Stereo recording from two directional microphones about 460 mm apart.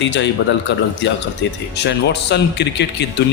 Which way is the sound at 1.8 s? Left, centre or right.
Left.